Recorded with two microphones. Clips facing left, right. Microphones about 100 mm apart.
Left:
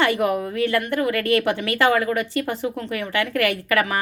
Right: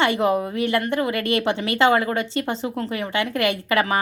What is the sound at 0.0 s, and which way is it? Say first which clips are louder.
Speech: right 1 dB; 25° right (ahead or behind).